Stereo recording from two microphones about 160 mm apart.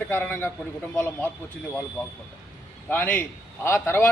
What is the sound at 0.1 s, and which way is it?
A man's voice, 15° left (ahead or behind).